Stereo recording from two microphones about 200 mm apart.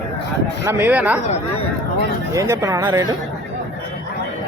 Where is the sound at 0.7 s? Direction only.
10° right (ahead or behind).